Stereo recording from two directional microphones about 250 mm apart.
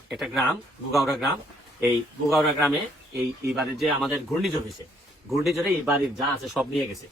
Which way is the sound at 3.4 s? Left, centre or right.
Right.